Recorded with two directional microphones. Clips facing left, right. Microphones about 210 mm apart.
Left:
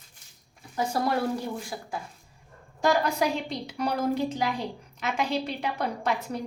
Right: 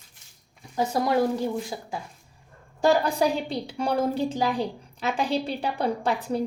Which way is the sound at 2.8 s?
35° right (ahead or behind).